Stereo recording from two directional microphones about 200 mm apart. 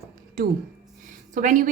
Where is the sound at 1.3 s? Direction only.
40° right (ahead or behind).